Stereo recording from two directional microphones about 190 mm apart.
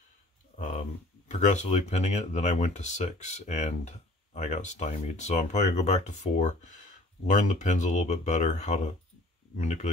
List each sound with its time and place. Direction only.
1.3 s speech: 35° left (ahead or behind)